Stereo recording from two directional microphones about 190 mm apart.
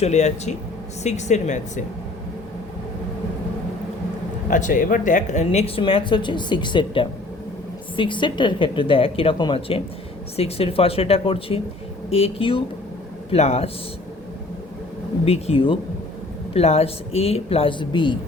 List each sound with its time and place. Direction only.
0.0 s speech: 35° left (ahead or behind)
4.4 s speech: 45° left (ahead or behind)
15.2 s speech: 30° left (ahead or behind)